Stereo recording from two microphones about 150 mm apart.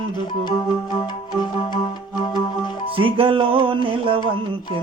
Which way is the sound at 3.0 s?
35° right (ahead or behind).